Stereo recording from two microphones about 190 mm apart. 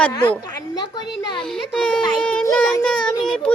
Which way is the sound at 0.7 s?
25° left (ahead or behind).